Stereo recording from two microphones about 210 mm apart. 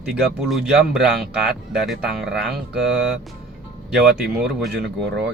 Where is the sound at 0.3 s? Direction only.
Centre (ahead or behind).